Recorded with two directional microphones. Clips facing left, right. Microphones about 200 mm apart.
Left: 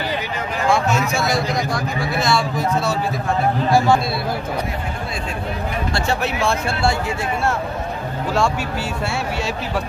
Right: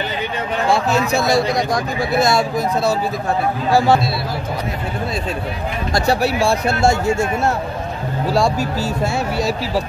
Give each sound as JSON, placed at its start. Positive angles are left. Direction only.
{"t": 0.7, "sound": "speech", "side_deg": -35}
{"t": 5.9, "sound": "speech", "side_deg": -35}